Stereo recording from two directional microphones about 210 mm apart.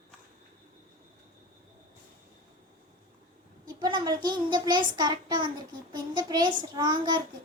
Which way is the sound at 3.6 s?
20° right (ahead or behind).